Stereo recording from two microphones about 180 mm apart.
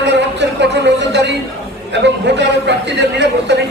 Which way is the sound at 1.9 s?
75° right (ahead or behind).